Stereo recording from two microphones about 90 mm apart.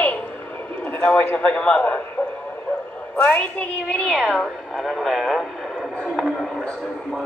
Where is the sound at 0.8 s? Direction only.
15° left (ahead or behind).